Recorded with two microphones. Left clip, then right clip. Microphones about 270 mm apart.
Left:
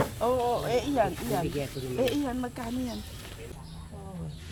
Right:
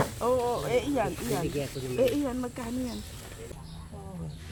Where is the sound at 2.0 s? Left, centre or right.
Centre.